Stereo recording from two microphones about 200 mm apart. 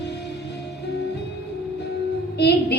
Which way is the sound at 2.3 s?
55° left (ahead or behind).